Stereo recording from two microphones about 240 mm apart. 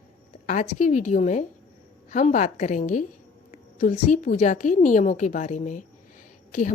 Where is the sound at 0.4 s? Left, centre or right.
Left.